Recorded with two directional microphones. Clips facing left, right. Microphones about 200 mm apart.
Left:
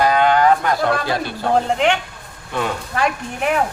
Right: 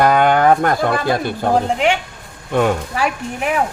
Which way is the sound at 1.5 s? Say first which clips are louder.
Left 1 dB; 5° right (ahead or behind).